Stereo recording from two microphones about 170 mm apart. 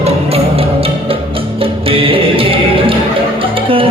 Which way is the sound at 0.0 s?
35° right (ahead or behind).